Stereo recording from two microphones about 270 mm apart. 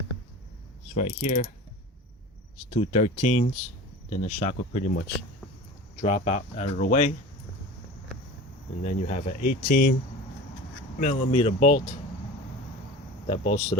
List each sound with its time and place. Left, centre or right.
0.9 s speech: left
2.6 s speech: left
8.8 s speech: left
11.0 s speech: left
13.2 s speech: left